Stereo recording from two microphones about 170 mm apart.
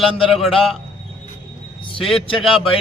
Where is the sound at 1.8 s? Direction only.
30° left (ahead or behind).